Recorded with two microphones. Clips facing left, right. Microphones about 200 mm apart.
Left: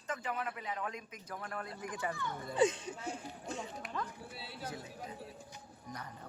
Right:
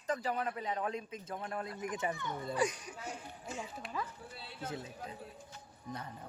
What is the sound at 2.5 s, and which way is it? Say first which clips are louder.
Speech: left 5 dB; 25° left (ahead or behind).